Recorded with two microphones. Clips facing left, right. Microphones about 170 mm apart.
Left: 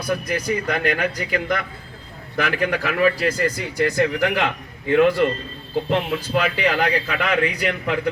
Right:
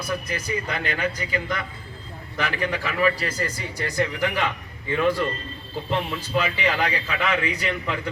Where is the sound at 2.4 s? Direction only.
85° left.